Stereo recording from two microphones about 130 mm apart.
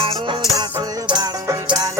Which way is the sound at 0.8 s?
30° right (ahead or behind).